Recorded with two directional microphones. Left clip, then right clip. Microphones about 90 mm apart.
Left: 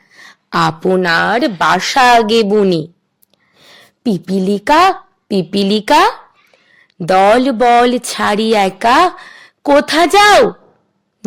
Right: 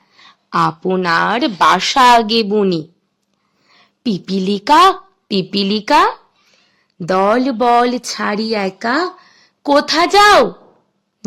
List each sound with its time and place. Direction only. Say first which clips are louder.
0.0 s a sound: left 6 dB; 35° left (ahead or behind)
0.5 s speech: left 1 dB; 70° left (ahead or behind)
0.9 s a woman's voice: left 2 dB; 45° left (ahead or behind)
1.4 s a woman's voice: even; 30° left (ahead or behind)
5.8 s a woman's voice: left 2 dB; 55° left (ahead or behind)
7.3 s a woman's voice: left 4 dB; 50° left (ahead or behind)
7.6 s a woman's voice: left 1 dB; 35° left (ahead or behind)
8.0 s a woman's voice: left 5 dB; 60° left (ahead or behind); by 10.5 s 40° left (ahead or behind)
11.2 s a sound: left 3 dB; 50° left (ahead or behind)